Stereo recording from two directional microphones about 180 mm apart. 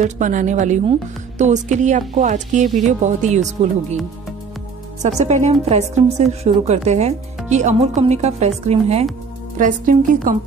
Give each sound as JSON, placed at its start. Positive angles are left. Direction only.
{"t": 0.0, "sound": "a woman's voice", "side_deg": -45}
{"t": 5.0, "sound": "a woman's voice", "side_deg": -40}
{"t": 9.6, "sound": "a woman's voice", "side_deg": -50}